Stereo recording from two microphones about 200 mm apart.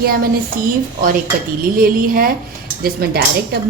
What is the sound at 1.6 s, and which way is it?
A woman's voice, 45° right (ahead or behind).